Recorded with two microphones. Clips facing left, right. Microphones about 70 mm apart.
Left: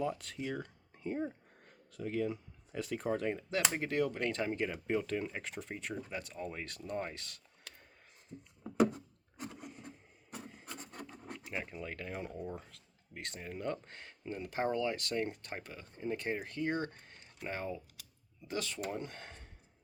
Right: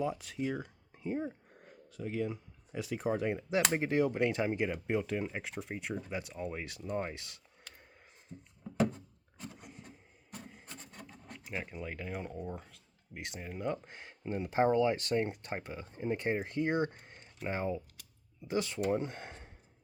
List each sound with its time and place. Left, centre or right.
0.0 s speech: centre
11.3 s speech: centre